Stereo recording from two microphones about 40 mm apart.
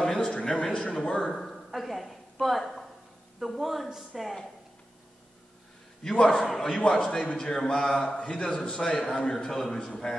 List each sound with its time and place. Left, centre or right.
0.0 s a sound: centre
0.3 s a man's voice: left
1.4 s speech: centre
6.0 s a man's voice: centre